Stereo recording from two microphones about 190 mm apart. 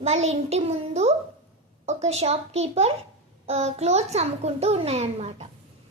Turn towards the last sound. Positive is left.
turn(degrees=-35)  # may be behind; listen again after turning